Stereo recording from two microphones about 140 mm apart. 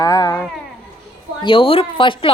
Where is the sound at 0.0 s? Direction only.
25° left (ahead or behind).